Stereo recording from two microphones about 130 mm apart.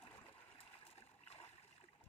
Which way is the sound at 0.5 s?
45° left (ahead or behind).